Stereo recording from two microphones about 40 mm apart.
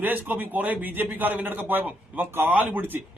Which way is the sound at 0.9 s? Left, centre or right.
Right.